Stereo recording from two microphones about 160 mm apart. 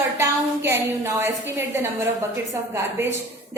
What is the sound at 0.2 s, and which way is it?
A woman's voice, 15° right (ahead or behind).